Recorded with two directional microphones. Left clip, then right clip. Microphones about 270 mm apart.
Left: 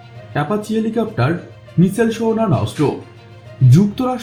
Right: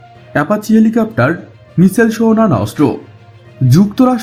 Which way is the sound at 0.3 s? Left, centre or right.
Right.